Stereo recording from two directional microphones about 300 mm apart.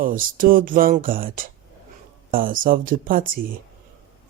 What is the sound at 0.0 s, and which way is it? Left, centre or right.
Speech, right.